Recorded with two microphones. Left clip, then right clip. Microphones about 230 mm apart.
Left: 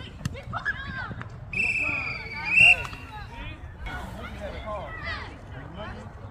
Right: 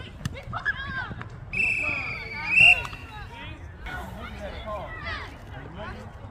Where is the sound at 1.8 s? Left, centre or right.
Right.